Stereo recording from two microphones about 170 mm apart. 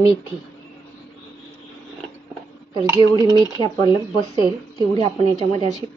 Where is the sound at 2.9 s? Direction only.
20° right (ahead or behind).